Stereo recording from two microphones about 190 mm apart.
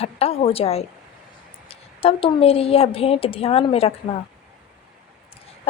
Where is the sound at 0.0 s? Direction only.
30° left (ahead or behind).